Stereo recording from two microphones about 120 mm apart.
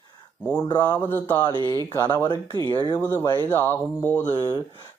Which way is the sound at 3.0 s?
20° left (ahead or behind).